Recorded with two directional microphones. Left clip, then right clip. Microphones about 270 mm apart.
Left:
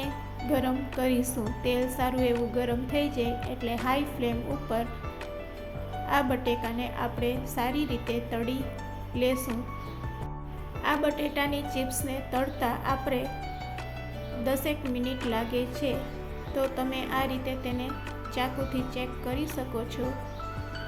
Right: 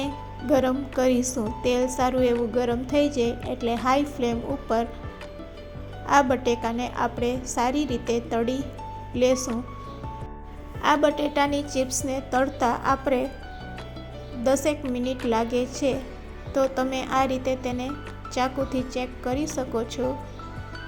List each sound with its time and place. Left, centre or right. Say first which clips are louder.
0.5 s speech: right 7 dB; centre
6.1 s speech: right 7 dB; centre
10.8 s speech: right 6 dB; centre
14.4 s speech: right 7 dB; centre